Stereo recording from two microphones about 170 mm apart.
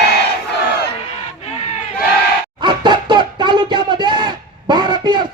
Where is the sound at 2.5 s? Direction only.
25° right (ahead or behind).